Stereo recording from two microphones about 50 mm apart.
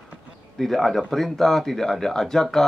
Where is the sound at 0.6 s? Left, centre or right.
Centre.